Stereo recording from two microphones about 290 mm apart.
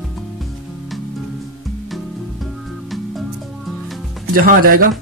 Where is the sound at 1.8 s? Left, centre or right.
Centre.